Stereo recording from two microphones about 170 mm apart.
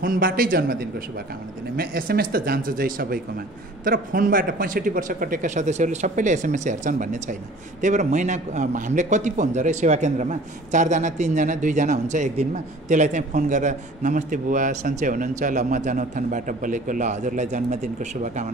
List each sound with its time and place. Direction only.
0.0 s a man's voice: 55° right (ahead or behind)